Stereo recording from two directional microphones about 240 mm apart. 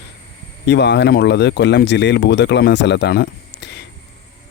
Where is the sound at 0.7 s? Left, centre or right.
Left.